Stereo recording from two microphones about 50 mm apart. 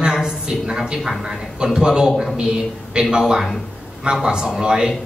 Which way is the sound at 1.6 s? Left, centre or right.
Centre.